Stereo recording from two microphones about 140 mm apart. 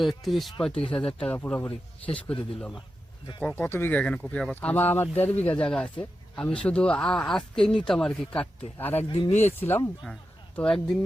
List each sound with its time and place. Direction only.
0.0 s a man's voice: centre (ahead or behind)
3.5 s speech: 15° left (ahead or behind)
9.0 s speech: 35° left (ahead or behind)
9.3 s speech: 55° left (ahead or behind)
9.6 s speech: 15° left (ahead or behind)
10.5 s a man's voice: 5° left (ahead or behind)